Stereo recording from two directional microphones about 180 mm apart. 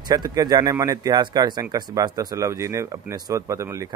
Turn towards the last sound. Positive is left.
turn(degrees=-15)  # may be behind; listen again after turning